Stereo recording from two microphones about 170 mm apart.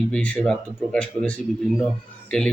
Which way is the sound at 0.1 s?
5° left (ahead or behind).